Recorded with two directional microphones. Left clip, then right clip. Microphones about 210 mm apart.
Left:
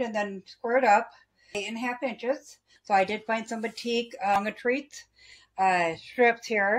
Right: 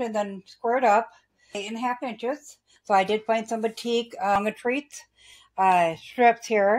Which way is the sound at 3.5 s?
30° right (ahead or behind).